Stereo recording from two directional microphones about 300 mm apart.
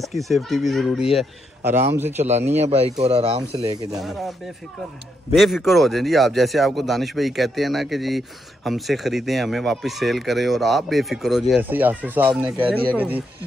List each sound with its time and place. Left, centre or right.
0.0 s speech: centre
2.5 s speech: right
5.3 s speech: centre